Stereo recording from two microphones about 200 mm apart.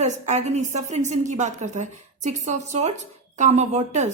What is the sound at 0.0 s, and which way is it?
A woman's voice, 35° right (ahead or behind).